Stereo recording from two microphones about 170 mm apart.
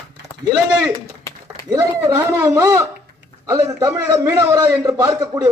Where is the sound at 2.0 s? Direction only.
15° right (ahead or behind).